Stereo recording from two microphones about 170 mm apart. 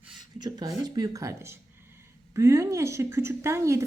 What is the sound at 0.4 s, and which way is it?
A woman's voice, 20° right (ahead or behind).